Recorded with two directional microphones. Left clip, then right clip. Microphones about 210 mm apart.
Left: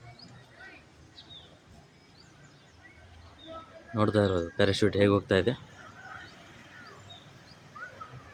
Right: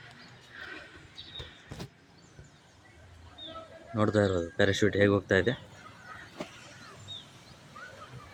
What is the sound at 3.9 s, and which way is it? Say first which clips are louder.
Speech: left 1 dB; 5° left (ahead or behind).